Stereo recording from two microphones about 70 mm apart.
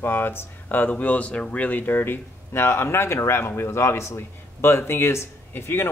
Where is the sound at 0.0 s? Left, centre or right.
Left.